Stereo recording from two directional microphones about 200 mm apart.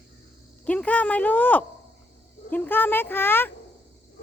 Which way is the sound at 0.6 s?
5° left (ahead or behind).